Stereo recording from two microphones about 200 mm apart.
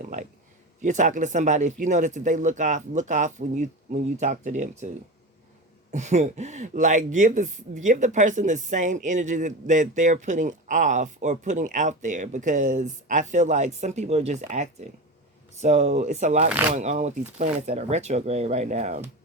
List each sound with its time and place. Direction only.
0.8 s speech: 40° right (ahead or behind)
5.9 s speech: 35° right (ahead or behind)